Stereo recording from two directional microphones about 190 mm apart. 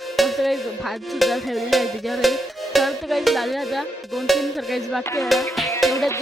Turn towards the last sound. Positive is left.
turn(degrees=15)  # may be behind; listen again after turning